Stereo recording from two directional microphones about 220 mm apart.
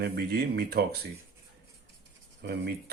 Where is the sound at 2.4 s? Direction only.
45° right (ahead or behind).